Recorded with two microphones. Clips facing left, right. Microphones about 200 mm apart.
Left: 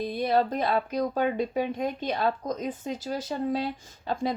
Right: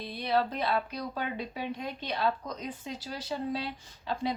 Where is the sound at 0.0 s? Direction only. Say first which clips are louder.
Left 5 dB; 50° left (ahead or behind).